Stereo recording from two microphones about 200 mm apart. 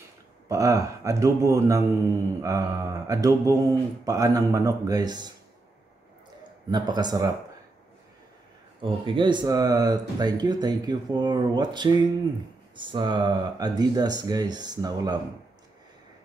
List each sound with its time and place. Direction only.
0.5 s speech: 15° right (ahead or behind)
6.7 s speech: 20° right (ahead or behind)
9.0 s speech: 25° right (ahead or behind)